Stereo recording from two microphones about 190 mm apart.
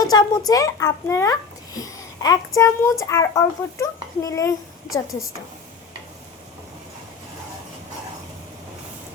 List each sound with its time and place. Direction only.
0.0 s a child's voice: 20° left (ahead or behind)